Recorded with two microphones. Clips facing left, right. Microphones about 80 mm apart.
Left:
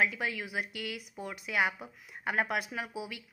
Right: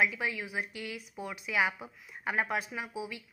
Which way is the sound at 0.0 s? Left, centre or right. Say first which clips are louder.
Even; left.